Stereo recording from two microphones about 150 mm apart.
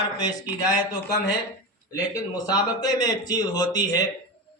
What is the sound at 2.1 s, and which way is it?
Speech, 25° left (ahead or behind).